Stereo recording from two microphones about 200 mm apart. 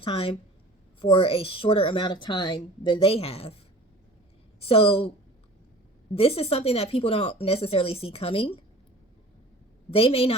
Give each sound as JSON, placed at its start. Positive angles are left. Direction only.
{"t": 0.0, "sound": "a woman's voice", "side_deg": 30}
{"t": 4.6, "sound": "a woman's voice", "side_deg": 30}
{"t": 6.1, "sound": "a woman's voice", "side_deg": 30}
{"t": 9.9, "sound": "a woman's voice", "side_deg": 30}